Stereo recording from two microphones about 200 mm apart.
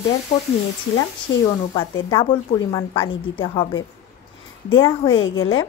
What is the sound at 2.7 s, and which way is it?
Speech, 15° left (ahead or behind).